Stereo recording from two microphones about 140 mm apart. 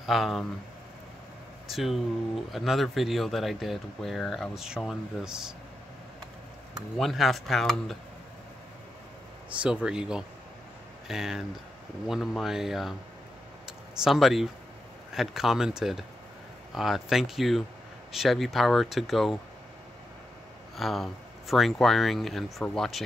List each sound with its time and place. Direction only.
0.0 s speech: centre (ahead or behind)
1.7 s speech: centre (ahead or behind)
7.0 s speech: centre (ahead or behind)
9.6 s speech: 5° right (ahead or behind)
13.7 s a sound: centre (ahead or behind)
15.1 s speech: centre (ahead or behind)
20.7 s speech: centre (ahead or behind)